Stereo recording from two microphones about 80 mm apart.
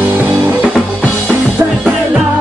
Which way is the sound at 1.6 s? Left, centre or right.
Right.